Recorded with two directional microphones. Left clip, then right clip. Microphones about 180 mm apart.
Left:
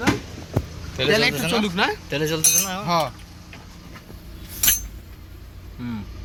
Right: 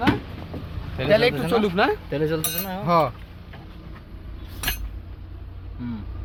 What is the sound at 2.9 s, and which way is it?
Speech, 65° right (ahead or behind).